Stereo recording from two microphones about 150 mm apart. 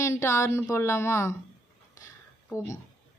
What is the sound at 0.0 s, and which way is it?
Speech, 20° left (ahead or behind).